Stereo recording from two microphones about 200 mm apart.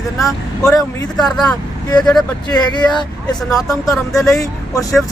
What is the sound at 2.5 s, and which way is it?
Speech, 20° left (ahead or behind).